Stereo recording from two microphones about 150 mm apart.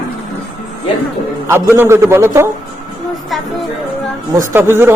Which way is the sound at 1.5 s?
15° right (ahead or behind).